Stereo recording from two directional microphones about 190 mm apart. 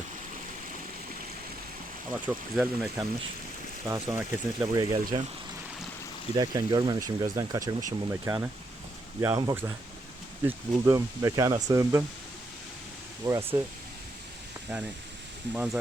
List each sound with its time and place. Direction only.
2.2 s speech: 10° right (ahead or behind)
6.3 s speech: 20° right (ahead or behind)
13.2 s speech: 15° right (ahead or behind)
15.5 s speech: 5° right (ahead or behind)